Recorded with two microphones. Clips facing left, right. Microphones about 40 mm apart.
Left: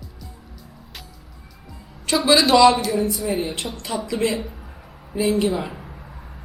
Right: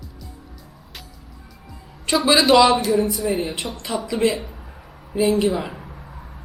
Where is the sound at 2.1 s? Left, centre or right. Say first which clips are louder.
Right 1 dB; centre.